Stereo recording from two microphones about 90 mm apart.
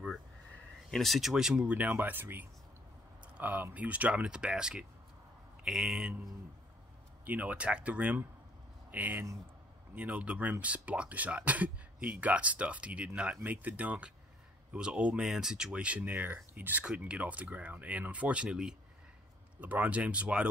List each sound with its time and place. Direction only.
0.9 s speech: centre (ahead or behind)
7.2 s speech: 15° right (ahead or behind)